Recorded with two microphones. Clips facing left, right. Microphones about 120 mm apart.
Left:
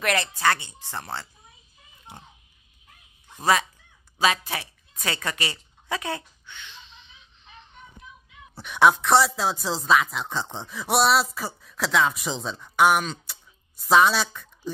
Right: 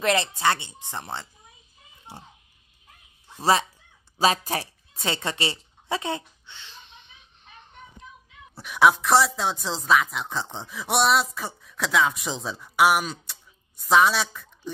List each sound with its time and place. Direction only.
0.0 s speech: 25° right (ahead or behind)
2.1 s a sound: 30° right (ahead or behind)
4.2 s speech: 35° right (ahead or behind)
4.9 s speech: 25° right (ahead or behind)
6.8 s music: 55° right (ahead or behind)
8.5 s speech: centre (ahead or behind)